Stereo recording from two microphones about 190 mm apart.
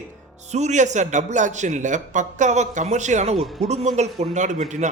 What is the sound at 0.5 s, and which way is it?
A man's voice, 35° right (ahead or behind).